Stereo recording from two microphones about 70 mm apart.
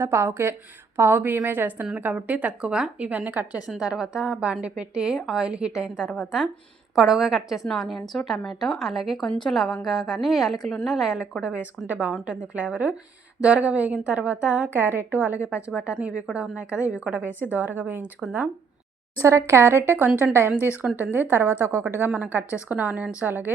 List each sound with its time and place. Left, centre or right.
0.0 s a woman's voice: right
3.7 s a woman's voice: centre
14.7 s a woman's voice: right
19.2 s a woman's voice: right
22.1 s speech: right